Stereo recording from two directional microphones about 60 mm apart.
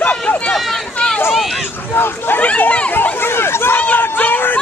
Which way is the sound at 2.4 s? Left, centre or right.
Left.